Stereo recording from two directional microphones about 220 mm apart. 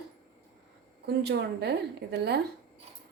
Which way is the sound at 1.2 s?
50° right (ahead or behind).